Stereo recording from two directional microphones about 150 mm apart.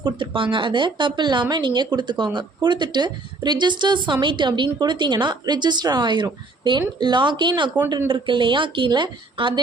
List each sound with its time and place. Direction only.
0.0 s speech: 35° right (ahead or behind)
7.9 s speech: 20° right (ahead or behind)
8.1 s speech: 35° right (ahead or behind)